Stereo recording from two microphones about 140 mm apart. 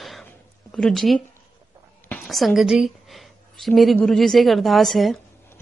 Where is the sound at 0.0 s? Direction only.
5° left (ahead or behind).